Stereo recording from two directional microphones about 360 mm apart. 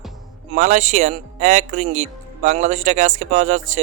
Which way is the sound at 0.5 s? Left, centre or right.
Centre.